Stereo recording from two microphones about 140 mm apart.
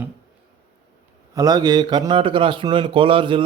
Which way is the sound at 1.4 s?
25° right (ahead or behind).